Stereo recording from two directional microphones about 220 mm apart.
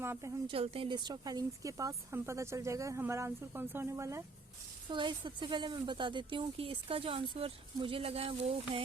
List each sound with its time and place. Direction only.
0.0 s a woman's voice: 10° right (ahead or behind)
0.4 s speech: 25° right (ahead or behind)